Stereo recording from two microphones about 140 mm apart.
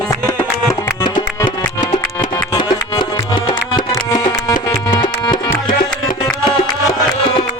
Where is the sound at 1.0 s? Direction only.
30° left (ahead or behind).